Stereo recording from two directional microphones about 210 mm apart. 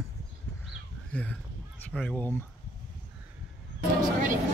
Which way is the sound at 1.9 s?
5° left (ahead or behind).